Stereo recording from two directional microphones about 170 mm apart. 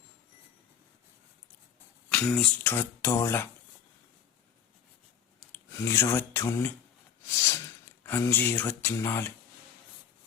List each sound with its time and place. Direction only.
2.0 s speech: 5° left (ahead or behind)
5.4 s speech: 15° left (ahead or behind)